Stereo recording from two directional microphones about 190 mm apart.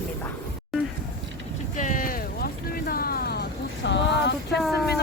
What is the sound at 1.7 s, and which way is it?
Boat, 40° left (ahead or behind).